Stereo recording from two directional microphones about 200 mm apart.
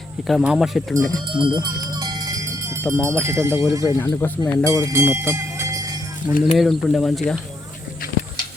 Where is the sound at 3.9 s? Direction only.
10° left (ahead or behind).